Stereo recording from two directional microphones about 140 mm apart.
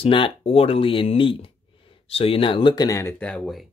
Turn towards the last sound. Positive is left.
turn(degrees=5)  # may be behind; listen again after turning